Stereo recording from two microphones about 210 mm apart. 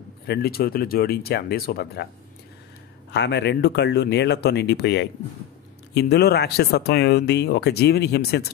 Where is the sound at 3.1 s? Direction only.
55° left (ahead or behind).